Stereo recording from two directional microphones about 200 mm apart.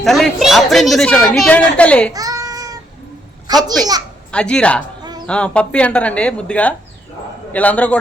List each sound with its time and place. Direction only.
0.0 s a woman's voice: centre (ahead or behind)
2.1 s child singing: 20° right (ahead or behind)
3.4 s a child's voice: 20° right (ahead or behind)
4.3 s a woman's voice: 5° left (ahead or behind)